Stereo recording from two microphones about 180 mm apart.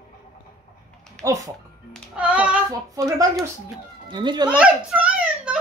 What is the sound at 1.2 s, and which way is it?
Speech, 20° right (ahead or behind).